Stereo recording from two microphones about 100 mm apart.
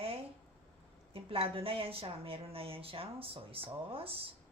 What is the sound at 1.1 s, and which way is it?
A woman's voice, 70° right (ahead or behind).